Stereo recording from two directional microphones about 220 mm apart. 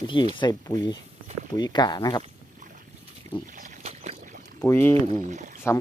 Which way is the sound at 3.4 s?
35° right (ahead or behind).